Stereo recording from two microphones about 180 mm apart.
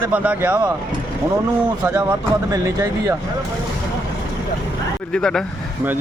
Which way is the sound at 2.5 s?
20° right (ahead or behind).